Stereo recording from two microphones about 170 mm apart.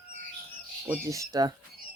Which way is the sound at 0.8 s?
15° right (ahead or behind).